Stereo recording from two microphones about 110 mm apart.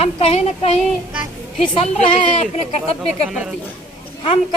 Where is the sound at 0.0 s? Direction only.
65° left (ahead or behind).